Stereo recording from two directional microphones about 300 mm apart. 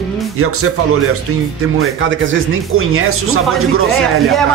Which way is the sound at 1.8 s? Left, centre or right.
Right.